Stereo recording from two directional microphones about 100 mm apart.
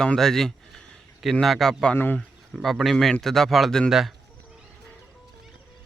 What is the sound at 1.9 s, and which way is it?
Speech, 20° left (ahead or behind).